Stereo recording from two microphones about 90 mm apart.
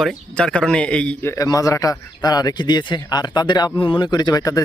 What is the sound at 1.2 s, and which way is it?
A man's voice, 40° left (ahead or behind).